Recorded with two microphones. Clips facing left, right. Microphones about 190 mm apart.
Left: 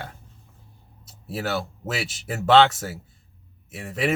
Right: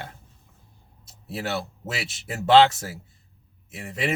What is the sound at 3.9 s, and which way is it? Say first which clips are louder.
Speech: left 3 dB; 25° right (ahead or behind).